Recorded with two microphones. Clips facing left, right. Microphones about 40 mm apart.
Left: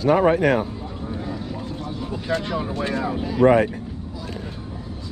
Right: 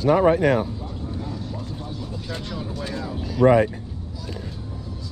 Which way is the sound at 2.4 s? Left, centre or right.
Left.